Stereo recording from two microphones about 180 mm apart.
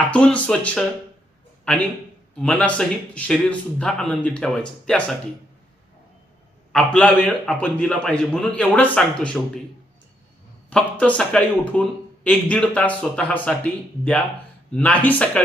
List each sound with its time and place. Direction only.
0.1 s a man's voice: 5° left (ahead or behind)
6.7 s a man's voice: 5° left (ahead or behind)
10.7 s speech: 5° left (ahead or behind)
14.7 s speech: 5° left (ahead or behind)